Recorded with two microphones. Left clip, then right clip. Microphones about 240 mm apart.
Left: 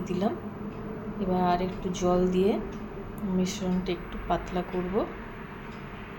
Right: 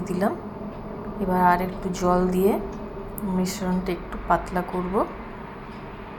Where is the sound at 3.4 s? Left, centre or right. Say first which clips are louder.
Right 4 dB; centre.